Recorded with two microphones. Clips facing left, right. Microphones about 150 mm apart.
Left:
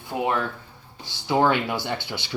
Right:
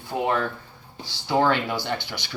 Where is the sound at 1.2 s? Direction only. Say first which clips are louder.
Left 1 dB; 15° left (ahead or behind).